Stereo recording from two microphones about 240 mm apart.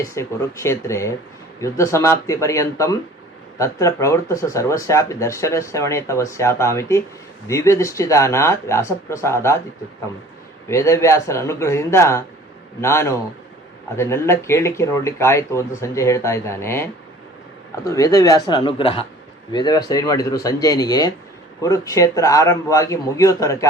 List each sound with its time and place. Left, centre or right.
0.0 s speech: centre
10.7 s speech: centre